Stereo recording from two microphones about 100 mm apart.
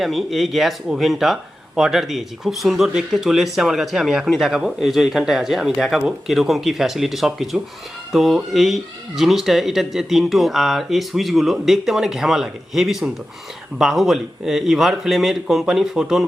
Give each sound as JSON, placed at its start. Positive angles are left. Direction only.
{"t": 0.0, "sound": "speech", "side_deg": 0}